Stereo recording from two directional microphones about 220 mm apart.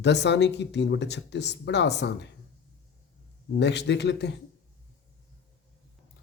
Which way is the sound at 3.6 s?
50° left (ahead or behind).